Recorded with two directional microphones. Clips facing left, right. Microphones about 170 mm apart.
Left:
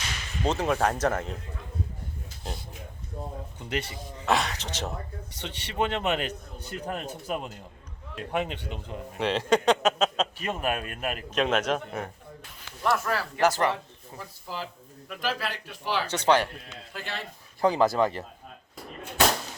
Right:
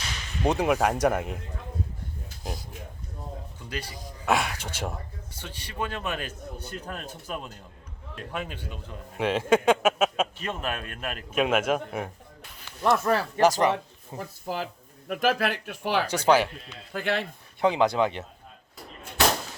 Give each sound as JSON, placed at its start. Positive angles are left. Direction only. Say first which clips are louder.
{"t": 0.4, "sound": "speech", "louder": "right 2 dB", "side_deg": -15}
{"t": 3.7, "sound": "a man's voice", "louder": "left 5 dB", "side_deg": 25}
{"t": 4.3, "sound": "speech", "louder": "even", "side_deg": -10}
{"t": 5.3, "sound": "a man's voice", "louder": "left 2 dB", "side_deg": 20}
{"t": 9.1, "sound": "speech", "louder": "right 2 dB", "side_deg": -5}
{"t": 10.3, "sound": "speech", "louder": "left 3 dB", "side_deg": 10}
{"t": 11.3, "sound": "speech", "louder": "right 2 dB", "side_deg": -10}
{"t": 12.8, "sound": "speech", "louder": "right 4 dB", "side_deg": -20}
{"t": 14.2, "sound": "speech", "louder": "right 5 dB", "side_deg": -50}
{"t": 16.0, "sound": "speech", "louder": "right 1 dB", "side_deg": -10}
{"t": 16.9, "sound": "speech", "louder": "right 9 dB", "side_deg": -60}
{"t": 17.6, "sound": "speech", "louder": "even", "side_deg": 0}